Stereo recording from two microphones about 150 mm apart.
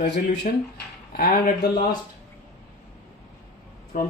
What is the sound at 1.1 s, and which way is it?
Speech, 80° left.